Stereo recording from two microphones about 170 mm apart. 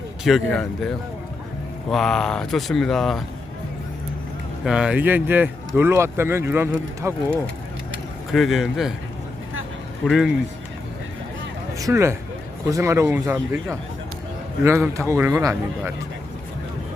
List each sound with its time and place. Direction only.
0.3 s speech: centre (ahead or behind)
4.6 s speech: 5° right (ahead or behind)
8.3 s speech: centre (ahead or behind)
10.1 s speech: centre (ahead or behind)
11.8 s speech: 20° right (ahead or behind)